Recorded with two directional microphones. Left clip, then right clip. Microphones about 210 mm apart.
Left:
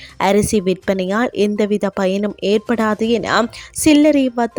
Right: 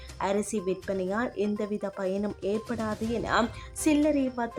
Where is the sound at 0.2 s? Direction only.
40° left (ahead or behind).